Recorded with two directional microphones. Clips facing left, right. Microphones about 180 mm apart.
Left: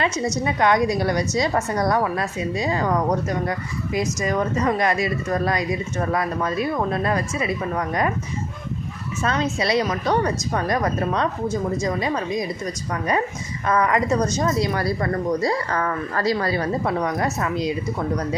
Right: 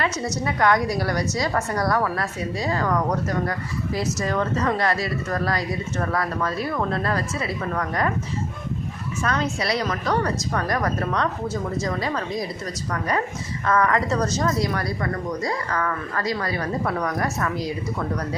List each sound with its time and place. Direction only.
0.4 s a woman's voice: 20° left (ahead or behind)
9.2 s a woman's voice: 20° left (ahead or behind)